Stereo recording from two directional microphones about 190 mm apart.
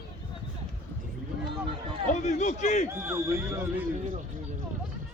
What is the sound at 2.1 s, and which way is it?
Speech, 40° left (ahead or behind).